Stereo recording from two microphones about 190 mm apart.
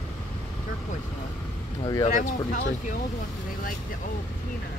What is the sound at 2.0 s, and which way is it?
Speech, 40° left (ahead or behind).